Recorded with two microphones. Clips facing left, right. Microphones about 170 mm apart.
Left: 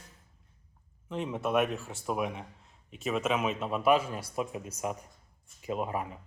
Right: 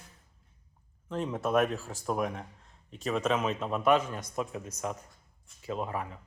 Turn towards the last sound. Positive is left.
turn(degrees=20)  # may be behind; listen again after turning